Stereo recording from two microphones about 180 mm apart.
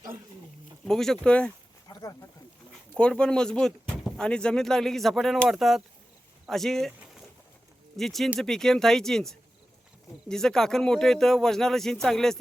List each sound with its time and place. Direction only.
0.9 s speech: 5° left (ahead or behind)
1.9 s a sound: 20° left (ahead or behind)
2.9 s speech: 5° left (ahead or behind)